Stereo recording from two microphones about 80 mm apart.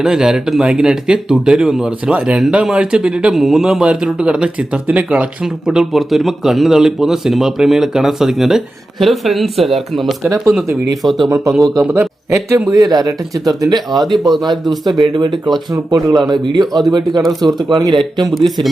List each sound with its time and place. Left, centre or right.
0.0 s speech: centre
11.3 s speech: right
11.8 s a man's voice: right
12.6 s speech: right
13.7 s speech: right
14.0 s speech: centre
14.8 s speech: right
15.3 s speech: centre
15.7 s speech: right
17.2 s speech: centre
17.7 s speech: right
18.3 s speech: centre